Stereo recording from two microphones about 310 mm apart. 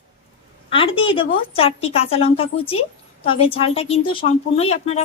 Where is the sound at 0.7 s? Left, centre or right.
Centre.